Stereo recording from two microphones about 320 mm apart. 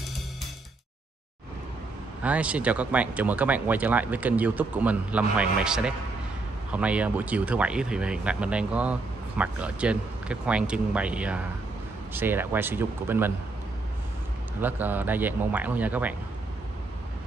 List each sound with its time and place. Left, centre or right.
2.2 s speech: centre
14.6 s speech: centre